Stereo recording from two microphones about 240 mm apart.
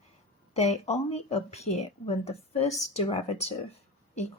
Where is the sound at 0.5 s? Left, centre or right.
Left.